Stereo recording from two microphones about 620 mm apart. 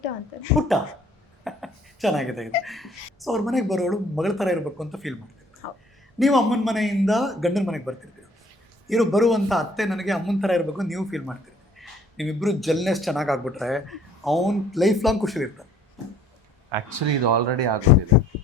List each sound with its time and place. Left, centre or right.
0.7 s speech: centre
5.6 s speech: left
6.1 s speech: centre
16.7 s speech: right